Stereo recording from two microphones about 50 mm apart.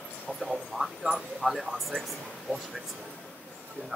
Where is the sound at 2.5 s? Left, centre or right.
Centre.